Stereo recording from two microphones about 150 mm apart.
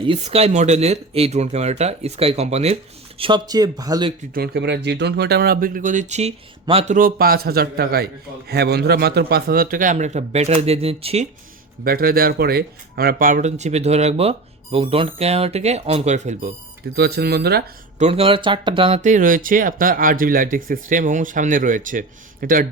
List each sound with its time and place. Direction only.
0.0 s speech: 40° right (ahead or behind)
3.2 s speech: 35° right (ahead or behind)
4.4 s a man's voice: 90° right; by 6.9 s 40° right (ahead or behind)
6.9 s a man's voice: 75° right (ahead or behind); by 11.3 s 40° right (ahead or behind)
11.8 s speech: 80° right; by 16.5 s 50° right (ahead or behind)
16.9 s speech: 90° right
18.0 s speech: 40° right (ahead or behind)
19.0 s speech: 60° right (ahead or behind)